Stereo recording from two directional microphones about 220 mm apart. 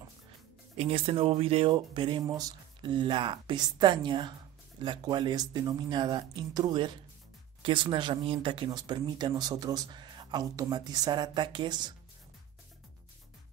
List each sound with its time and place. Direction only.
0.7 s speech: 25° right (ahead or behind)